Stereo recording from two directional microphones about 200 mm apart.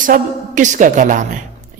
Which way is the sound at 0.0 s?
40° right (ahead or behind).